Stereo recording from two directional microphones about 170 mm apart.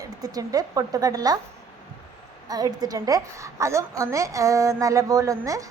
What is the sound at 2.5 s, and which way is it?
A woman's voice, 20° right (ahead or behind).